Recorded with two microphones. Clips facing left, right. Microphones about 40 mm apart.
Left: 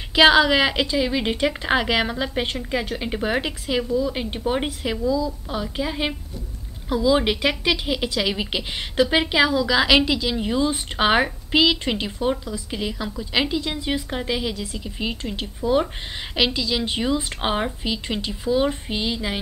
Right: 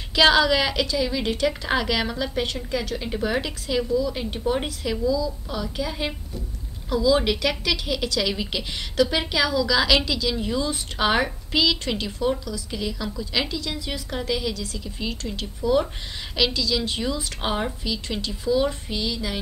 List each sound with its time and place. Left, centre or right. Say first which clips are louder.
0.1 s a woman's voice: left 3 dB; left